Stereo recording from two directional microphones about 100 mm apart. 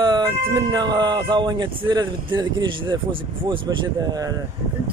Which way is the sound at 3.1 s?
55° right (ahead or behind).